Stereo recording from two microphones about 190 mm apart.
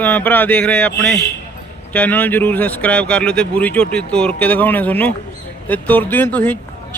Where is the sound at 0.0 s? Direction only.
10° left (ahead or behind).